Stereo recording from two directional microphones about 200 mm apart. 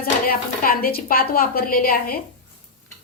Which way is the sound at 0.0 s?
45° left (ahead or behind).